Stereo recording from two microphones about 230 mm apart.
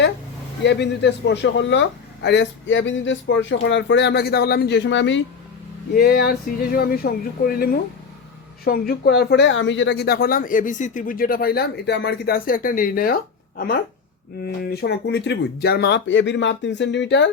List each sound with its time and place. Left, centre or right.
0.6 s speech: left
5.9 s speech: left
14.4 s speech: left